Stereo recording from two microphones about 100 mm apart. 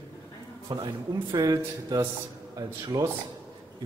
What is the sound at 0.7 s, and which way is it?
Speech, 45° right (ahead or behind).